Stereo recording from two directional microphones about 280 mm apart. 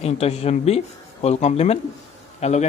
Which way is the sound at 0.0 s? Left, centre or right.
Left.